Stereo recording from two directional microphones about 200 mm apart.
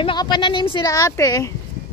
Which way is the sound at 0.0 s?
20° left (ahead or behind).